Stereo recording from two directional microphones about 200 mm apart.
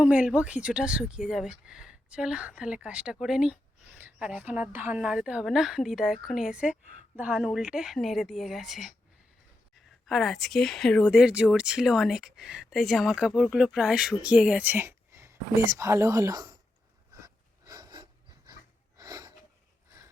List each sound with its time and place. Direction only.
0.0 s speech: 5° right (ahead or behind)
10.1 s speech: centre (ahead or behind); by 16.6 s 15° right (ahead or behind)
17.2 s a sound: 15° right (ahead or behind)